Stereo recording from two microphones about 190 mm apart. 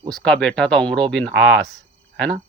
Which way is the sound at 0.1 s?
5° left (ahead or behind).